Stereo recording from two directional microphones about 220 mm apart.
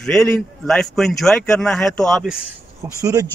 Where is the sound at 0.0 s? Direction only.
Centre (ahead or behind).